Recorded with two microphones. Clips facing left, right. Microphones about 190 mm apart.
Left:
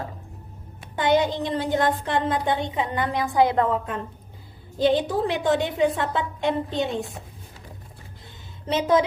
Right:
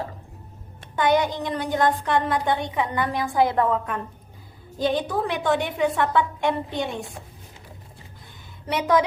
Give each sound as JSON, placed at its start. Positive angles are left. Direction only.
{"t": 0.9, "sound": "a woman's voice", "side_deg": 20}
{"t": 8.6, "sound": "a woman's voice", "side_deg": 25}